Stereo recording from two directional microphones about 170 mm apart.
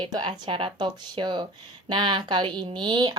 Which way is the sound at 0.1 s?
25° right (ahead or behind).